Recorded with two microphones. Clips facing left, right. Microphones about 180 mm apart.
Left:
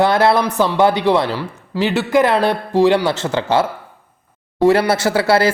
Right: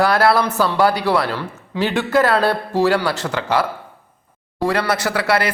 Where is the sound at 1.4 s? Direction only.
10° left (ahead or behind).